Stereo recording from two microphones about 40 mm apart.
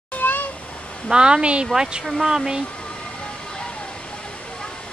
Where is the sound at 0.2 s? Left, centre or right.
Left.